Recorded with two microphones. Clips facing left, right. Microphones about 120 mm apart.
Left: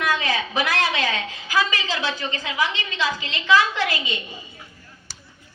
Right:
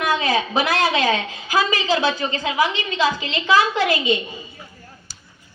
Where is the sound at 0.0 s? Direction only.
25° right (ahead or behind).